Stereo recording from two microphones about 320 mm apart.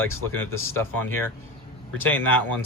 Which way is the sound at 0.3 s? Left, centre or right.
Centre.